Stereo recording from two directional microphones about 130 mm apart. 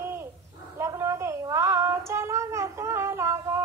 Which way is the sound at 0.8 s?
20° right (ahead or behind).